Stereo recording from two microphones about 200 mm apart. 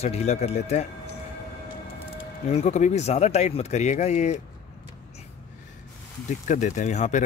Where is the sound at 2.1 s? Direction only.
30° left (ahead or behind).